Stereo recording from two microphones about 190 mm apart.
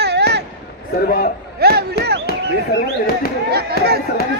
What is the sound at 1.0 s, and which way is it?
Speech, 50° left (ahead or behind).